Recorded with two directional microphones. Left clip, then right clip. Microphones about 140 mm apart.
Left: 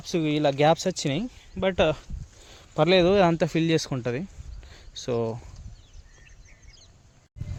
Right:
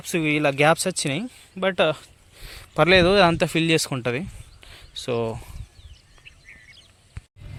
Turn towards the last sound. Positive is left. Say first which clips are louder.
# right 9 dB
turn(degrees=60)  # may be behind; listen again after turning